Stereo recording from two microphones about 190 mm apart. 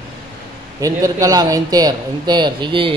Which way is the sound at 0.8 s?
15° right (ahead or behind).